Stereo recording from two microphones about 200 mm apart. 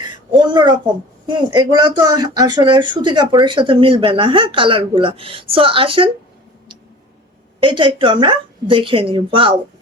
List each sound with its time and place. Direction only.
0.3 s a woman's voice: 20° right (ahead or behind)
7.6 s speech: 25° right (ahead or behind)